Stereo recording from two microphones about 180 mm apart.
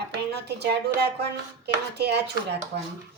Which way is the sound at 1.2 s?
65° right (ahead or behind).